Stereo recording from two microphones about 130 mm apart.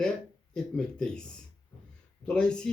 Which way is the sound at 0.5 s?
5° left (ahead or behind).